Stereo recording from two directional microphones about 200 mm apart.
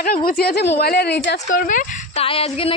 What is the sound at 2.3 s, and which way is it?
Music, 30° left (ahead or behind).